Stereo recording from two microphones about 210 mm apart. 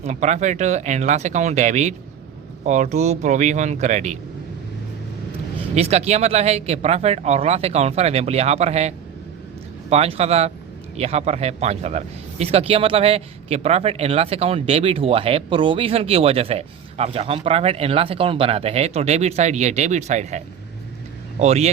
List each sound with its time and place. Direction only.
0.0 s speech: 35° right (ahead or behind)
5.7 s a man's voice: 30° right (ahead or behind)